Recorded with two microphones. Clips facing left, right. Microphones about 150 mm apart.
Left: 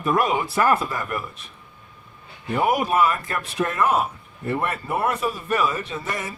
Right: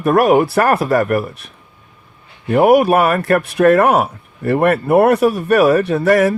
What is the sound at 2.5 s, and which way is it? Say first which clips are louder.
Speech: right 10 dB; 65° right (ahead or behind).